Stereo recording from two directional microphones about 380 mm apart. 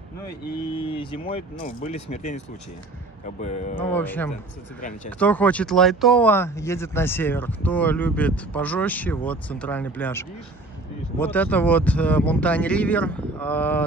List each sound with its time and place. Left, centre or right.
0.7 s speech: centre
3.7 s speech: centre